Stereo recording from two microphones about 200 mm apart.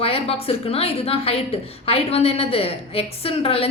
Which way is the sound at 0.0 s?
30° left (ahead or behind).